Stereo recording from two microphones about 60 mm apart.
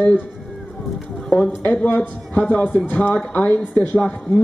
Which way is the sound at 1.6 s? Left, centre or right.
Left.